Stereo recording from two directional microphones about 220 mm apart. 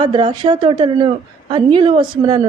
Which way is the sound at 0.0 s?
20° right (ahead or behind).